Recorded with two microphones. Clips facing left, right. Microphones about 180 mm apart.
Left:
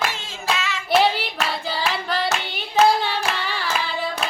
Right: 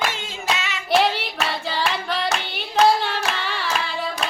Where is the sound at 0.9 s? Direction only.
Centre (ahead or behind).